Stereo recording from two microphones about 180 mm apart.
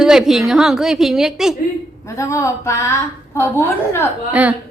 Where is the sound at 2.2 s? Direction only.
15° left (ahead or behind).